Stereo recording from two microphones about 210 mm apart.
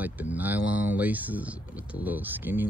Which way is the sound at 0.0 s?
10° right (ahead or behind).